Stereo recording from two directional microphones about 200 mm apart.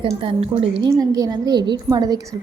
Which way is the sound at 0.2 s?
30° right (ahead or behind).